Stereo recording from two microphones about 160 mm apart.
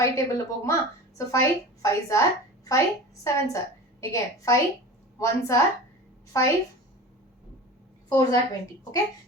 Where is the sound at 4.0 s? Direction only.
20° left (ahead or behind).